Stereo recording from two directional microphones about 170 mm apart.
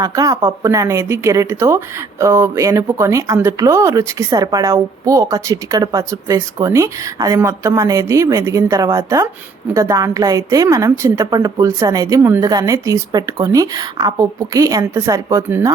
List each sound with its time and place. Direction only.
0.0 s a woman's voice: 20° right (ahead or behind)